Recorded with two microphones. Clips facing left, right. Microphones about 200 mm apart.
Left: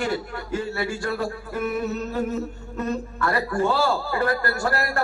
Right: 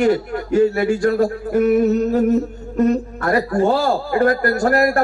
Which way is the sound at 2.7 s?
40° right (ahead or behind).